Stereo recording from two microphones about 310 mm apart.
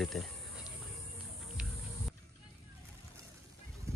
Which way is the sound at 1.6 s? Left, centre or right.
Centre.